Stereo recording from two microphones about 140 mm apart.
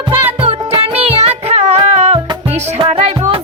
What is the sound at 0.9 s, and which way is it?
Music, 50° right (ahead or behind).